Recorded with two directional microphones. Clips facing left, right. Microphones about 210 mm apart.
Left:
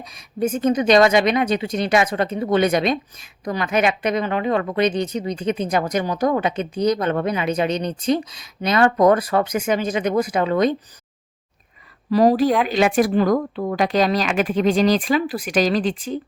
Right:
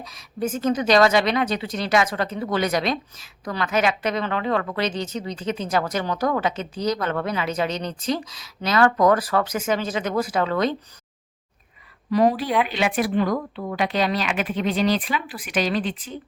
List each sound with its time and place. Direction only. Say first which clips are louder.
0.1 s a woman's voice: left 4 dB; 20° left (ahead or behind)
12.1 s speech: left 4 dB; 40° left (ahead or behind)